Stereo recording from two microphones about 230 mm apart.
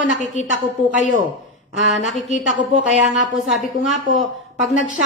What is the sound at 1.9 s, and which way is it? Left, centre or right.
Speech, centre.